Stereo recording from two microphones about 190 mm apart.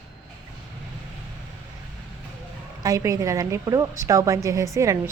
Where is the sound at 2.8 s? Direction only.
15° right (ahead or behind).